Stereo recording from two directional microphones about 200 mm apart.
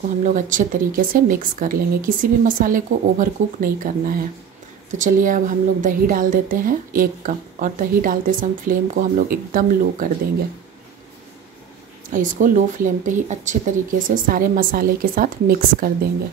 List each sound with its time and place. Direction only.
0.2 s a woman's voice: 40° right (ahead or behind)
4.9 s a woman's voice: 40° right (ahead or behind)
12.1 s speech: 40° right (ahead or behind)